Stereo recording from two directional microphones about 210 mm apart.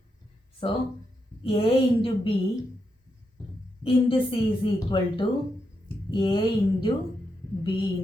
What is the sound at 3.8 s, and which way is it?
Speech, 25° left (ahead or behind).